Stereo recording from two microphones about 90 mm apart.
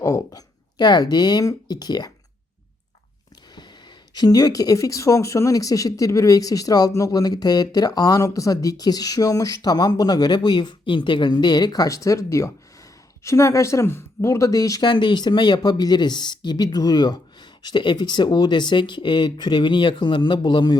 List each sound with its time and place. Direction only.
0.0 s speech: 35° left (ahead or behind)
0.8 s speech: 50° left (ahead or behind)
4.1 s speech: 50° left (ahead or behind)
14.8 s speech: 55° left (ahead or behind)